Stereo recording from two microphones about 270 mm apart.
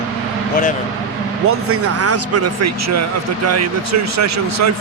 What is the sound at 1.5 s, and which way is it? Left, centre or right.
A man's voice, right.